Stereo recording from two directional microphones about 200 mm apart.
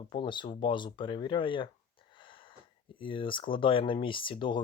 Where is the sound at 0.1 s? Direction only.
25° left (ahead or behind).